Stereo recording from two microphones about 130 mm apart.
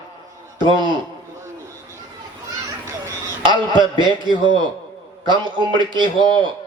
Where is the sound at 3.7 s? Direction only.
35° right (ahead or behind).